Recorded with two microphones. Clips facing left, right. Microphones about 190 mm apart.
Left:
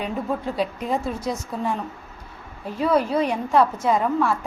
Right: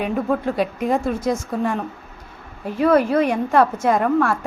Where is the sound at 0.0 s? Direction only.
60° right (ahead or behind).